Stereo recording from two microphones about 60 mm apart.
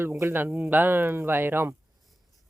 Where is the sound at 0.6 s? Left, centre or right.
Right.